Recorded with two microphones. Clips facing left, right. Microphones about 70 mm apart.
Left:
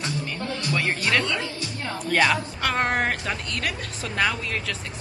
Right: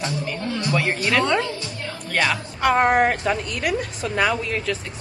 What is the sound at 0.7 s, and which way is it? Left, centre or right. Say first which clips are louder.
A woman's voice: right 3 dB; centre.